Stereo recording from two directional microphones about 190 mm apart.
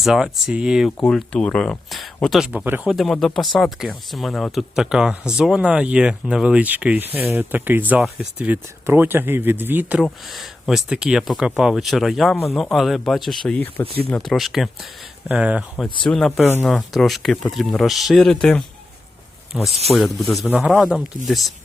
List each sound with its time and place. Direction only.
0.0 s speech: centre (ahead or behind)